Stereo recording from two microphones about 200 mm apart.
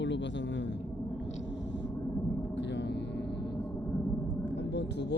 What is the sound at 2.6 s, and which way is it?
Gong, 60° left (ahead or behind).